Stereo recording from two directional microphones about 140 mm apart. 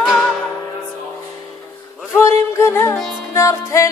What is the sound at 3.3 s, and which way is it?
Music, 20° left (ahead or behind).